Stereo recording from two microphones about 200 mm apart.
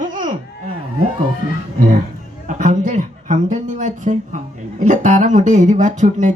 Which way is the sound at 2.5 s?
40° right (ahead or behind).